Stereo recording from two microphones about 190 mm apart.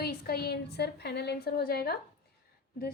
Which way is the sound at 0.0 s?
55° left (ahead or behind).